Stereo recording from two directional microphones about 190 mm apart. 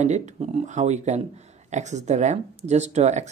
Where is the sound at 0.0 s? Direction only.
35° right (ahead or behind).